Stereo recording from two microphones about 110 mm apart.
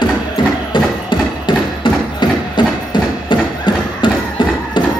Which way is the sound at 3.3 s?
45° left (ahead or behind).